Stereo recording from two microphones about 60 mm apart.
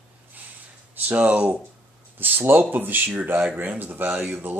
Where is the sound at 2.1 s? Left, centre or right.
Right.